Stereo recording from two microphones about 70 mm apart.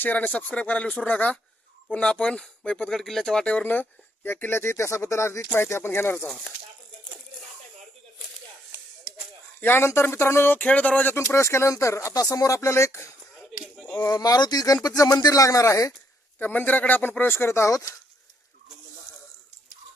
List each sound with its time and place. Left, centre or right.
0.0 s speech: left
2.9 s speech: centre
3.4 s speech: left
6.2 s speech: centre
9.6 s speech: left
14.1 s speech: left
16.4 s speech: left
17.7 s speech: left